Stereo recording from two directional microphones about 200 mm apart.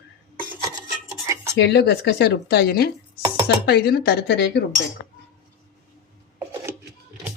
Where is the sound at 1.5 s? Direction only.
55° left (ahead or behind).